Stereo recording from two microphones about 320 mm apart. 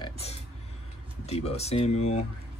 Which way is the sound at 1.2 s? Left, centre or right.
Centre.